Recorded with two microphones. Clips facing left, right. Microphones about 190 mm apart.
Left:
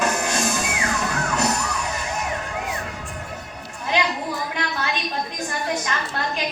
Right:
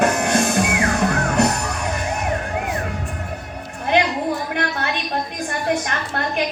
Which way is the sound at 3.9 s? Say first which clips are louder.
Right 5 dB; 60° right (ahead or behind).